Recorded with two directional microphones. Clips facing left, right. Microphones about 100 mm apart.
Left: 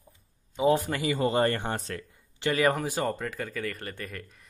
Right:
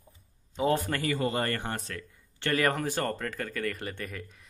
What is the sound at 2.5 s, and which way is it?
Speech, 5° left (ahead or behind).